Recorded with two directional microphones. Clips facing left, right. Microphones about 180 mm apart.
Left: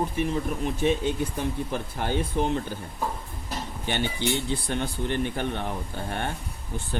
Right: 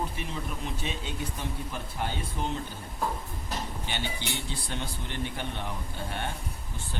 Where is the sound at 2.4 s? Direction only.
60° left (ahead or behind).